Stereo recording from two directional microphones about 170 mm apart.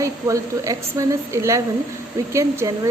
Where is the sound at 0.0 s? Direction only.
20° right (ahead or behind).